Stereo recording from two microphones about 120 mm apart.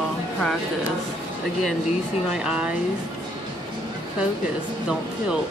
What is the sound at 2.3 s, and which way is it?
Speech, 5° right (ahead or behind).